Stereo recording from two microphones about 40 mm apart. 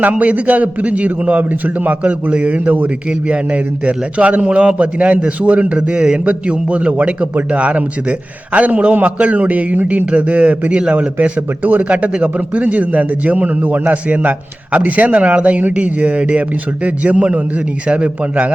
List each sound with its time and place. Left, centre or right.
0.0 s a man's voice: right
3.1 s speech: right
10.7 s a man's voice: right
11.6 s speech: right